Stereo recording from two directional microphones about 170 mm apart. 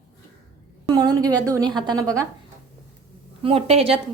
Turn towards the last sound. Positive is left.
turn(degrees=-35)  # may be behind; listen again after turning